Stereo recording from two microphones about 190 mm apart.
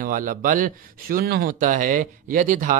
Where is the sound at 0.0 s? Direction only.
45° right (ahead or behind).